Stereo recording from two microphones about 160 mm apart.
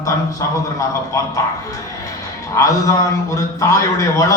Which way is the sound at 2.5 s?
20° left (ahead or behind).